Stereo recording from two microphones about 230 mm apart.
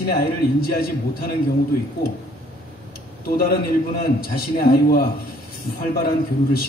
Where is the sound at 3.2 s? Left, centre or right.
Left.